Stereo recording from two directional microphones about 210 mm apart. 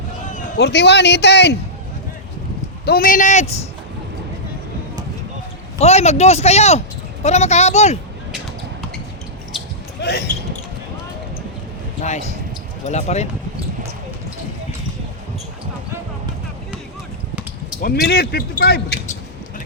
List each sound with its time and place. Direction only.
0.6 s a man's voice: 55° left (ahead or behind)
2.8 s speech: 45° left (ahead or behind)
5.8 s speech: 30° left (ahead or behind)
10.0 s speech: 50° left (ahead or behind)
12.8 s speech: 30° left (ahead or behind)
17.8 s a man's voice: 50° left (ahead or behind)